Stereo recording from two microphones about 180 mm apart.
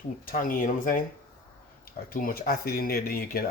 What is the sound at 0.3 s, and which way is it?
Speech, 50° left (ahead or behind).